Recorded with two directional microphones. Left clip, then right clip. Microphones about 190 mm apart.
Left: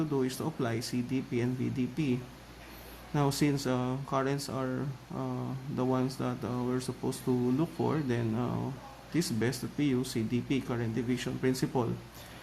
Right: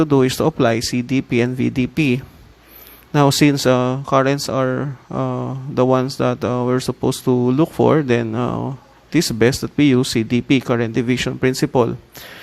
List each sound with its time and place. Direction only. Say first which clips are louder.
0.0 s speech: right 17 dB; 40° right (ahead or behind)